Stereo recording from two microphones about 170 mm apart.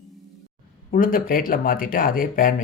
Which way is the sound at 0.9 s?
55° left (ahead or behind).